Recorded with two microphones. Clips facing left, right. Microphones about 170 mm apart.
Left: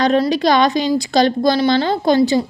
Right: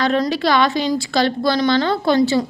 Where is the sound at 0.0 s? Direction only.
20° left (ahead or behind).